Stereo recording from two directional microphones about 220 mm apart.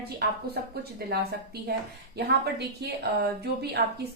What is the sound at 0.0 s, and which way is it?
A woman's voice, 45° right (ahead or behind).